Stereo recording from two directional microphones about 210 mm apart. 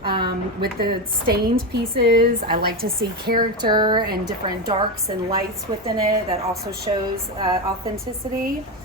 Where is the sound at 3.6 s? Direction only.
20° right (ahead or behind).